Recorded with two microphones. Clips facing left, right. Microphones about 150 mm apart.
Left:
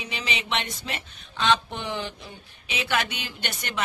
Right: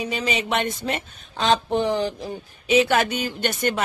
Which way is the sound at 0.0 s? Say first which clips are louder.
Right 8 dB; 45° right (ahead or behind).